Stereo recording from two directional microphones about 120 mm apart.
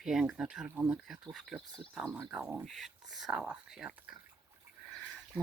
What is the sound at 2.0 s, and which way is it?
Speech, 15° right (ahead or behind).